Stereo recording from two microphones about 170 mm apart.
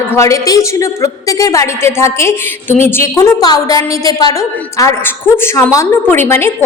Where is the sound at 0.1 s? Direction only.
20° left (ahead or behind).